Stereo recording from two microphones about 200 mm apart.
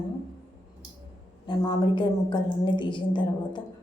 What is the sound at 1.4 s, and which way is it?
A woman's voice, 25° left (ahead or behind).